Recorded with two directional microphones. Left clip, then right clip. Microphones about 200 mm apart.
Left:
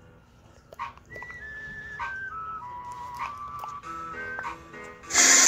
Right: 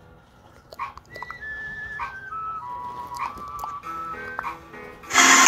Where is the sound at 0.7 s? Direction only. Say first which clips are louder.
Right 4 dB; centre (ahead or behind).